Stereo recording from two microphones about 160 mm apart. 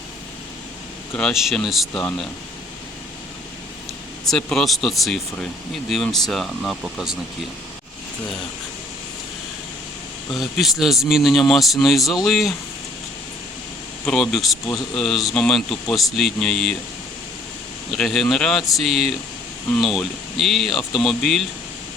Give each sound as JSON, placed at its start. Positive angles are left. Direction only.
{"t": 1.1, "sound": "speech", "side_deg": 0}
{"t": 4.3, "sound": "speech", "side_deg": 5}
{"t": 10.4, "sound": "speech", "side_deg": 0}
{"t": 14.0, "sound": "speech", "side_deg": 5}
{"t": 17.9, "sound": "speech", "side_deg": 0}